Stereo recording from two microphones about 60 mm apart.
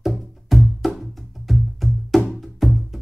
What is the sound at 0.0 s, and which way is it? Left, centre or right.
Music, centre.